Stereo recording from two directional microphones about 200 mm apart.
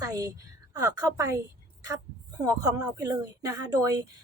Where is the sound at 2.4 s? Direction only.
15° right (ahead or behind).